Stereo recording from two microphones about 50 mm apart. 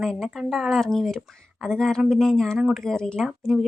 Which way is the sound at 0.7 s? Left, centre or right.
Centre.